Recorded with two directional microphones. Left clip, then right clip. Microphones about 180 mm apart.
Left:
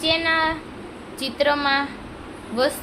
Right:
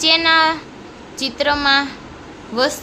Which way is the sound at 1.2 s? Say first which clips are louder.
Right 3 dB; 15° right (ahead or behind).